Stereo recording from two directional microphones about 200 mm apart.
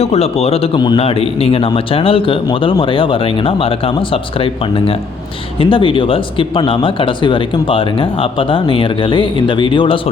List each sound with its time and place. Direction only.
0.0 s a man's voice: 30° left (ahead or behind)